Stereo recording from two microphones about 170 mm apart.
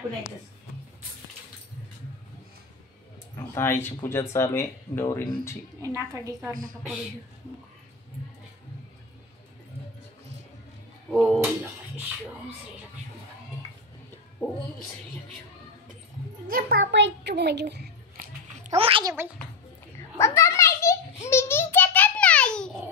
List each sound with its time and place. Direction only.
3.5 s speech: 15° left (ahead or behind)
5.8 s a woman's voice: 20° right (ahead or behind)
6.5 s a woman's voice: 55° right (ahead or behind)
11.2 s speech: 10° right (ahead or behind)
14.4 s speech: 10° left (ahead or behind)
16.4 s a child's voice: 60° right (ahead or behind); by 17.8 s 80° right
18.8 s a child's voice: 30° right (ahead or behind)
19.0 s a woman's voice: 15° right (ahead or behind)
20.2 s a sound: 15° left (ahead or behind)
21.3 s babbling: 15° left (ahead or behind)